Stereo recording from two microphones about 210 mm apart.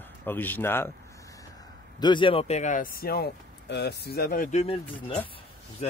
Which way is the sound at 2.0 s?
20° left (ahead or behind).